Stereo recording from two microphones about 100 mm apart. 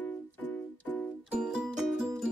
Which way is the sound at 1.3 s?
10° right (ahead or behind).